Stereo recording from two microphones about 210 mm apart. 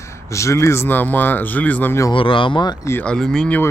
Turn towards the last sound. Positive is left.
turn(degrees=5)  # may be behind; listen again after turning